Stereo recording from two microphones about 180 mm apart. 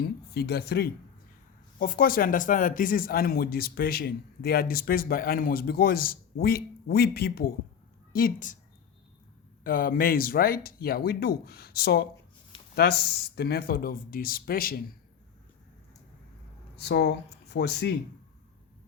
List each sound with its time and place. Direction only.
0.0 s speech: 60° left (ahead or behind)
9.6 s speech: 50° left (ahead or behind)
16.7 s speech: 65° left (ahead or behind)